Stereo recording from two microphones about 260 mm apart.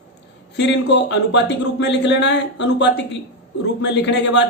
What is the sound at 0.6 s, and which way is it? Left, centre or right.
Speech, left.